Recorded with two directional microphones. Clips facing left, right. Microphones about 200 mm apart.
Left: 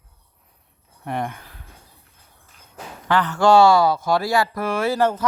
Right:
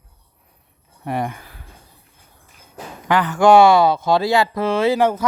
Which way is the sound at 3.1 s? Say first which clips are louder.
Right 3 dB; 15° right (ahead or behind).